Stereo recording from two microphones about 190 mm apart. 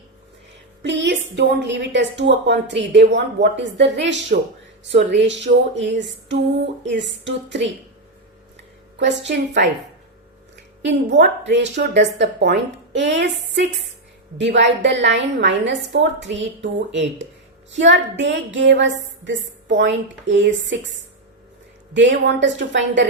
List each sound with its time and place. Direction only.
0.8 s a woman's voice: 65° right (ahead or behind)
9.0 s a woman's voice: 70° right (ahead or behind)
10.8 s a woman's voice: 65° right (ahead or behind)
21.9 s a woman's voice: 70° right (ahead or behind)